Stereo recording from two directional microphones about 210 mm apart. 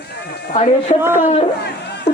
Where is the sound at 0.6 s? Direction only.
35° left (ahead or behind).